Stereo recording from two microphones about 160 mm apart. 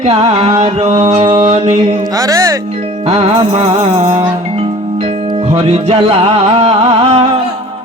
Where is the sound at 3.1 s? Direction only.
35° right (ahead or behind).